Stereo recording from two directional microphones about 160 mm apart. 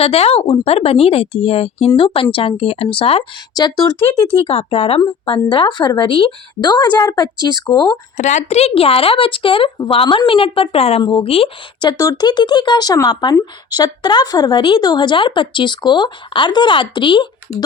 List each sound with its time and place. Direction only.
0.0 s speech: 40° left (ahead or behind)
3.5 s a woman's voice: 25° left (ahead or behind)
4.4 s a woman's voice: 40° left (ahead or behind)
8.1 s a woman's voice: 50° left (ahead or behind); by 17.2 s 30° left (ahead or behind)